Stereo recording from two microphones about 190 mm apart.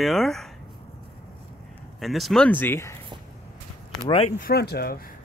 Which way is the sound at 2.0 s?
Centre (ahead or behind).